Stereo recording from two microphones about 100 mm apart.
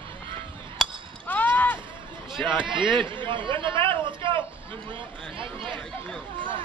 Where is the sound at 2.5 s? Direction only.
55° right (ahead or behind).